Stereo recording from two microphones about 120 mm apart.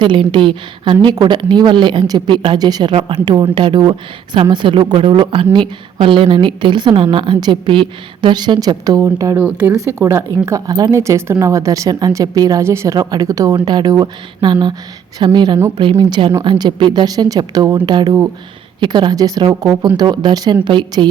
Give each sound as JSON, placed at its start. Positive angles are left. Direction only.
{"t": 0.0, "sound": "a woman's voice", "side_deg": -40}
{"t": 9.4, "sound": "speech", "side_deg": -15}
{"t": 9.7, "sound": "a woman's voice", "side_deg": -25}